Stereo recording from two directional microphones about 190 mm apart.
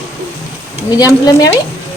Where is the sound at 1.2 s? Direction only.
20° left (ahead or behind).